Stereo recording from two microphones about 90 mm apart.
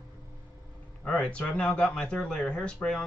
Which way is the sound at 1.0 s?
10° left (ahead or behind).